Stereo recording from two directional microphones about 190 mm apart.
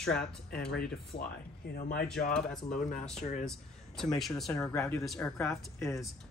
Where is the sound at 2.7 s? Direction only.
40° left (ahead or behind).